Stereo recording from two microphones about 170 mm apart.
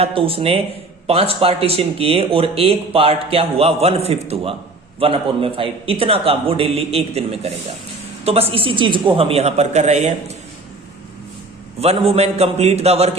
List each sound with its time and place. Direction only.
0.0 s speech: 35° right (ahead or behind)
11.8 s speech: 35° right (ahead or behind)